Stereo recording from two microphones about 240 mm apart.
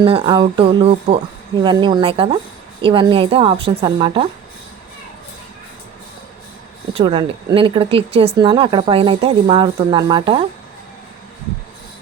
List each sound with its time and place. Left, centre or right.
0.0 s speech: right
6.9 s speech: right